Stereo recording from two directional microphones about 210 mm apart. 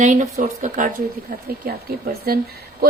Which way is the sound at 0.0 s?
35° right (ahead or behind).